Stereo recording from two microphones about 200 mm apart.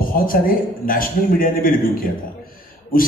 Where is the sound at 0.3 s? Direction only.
45° left (ahead or behind).